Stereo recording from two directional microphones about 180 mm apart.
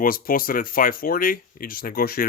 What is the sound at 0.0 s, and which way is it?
Speech, 50° left (ahead or behind).